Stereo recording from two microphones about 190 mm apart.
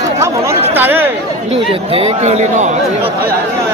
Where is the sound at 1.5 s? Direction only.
30° right (ahead or behind).